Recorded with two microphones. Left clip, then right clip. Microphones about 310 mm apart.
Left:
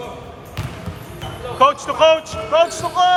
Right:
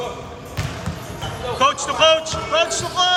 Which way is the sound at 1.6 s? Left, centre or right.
Centre.